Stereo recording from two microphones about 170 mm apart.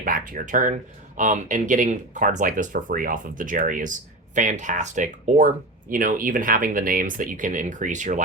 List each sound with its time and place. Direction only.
0.0 s speech: 55° right (ahead or behind)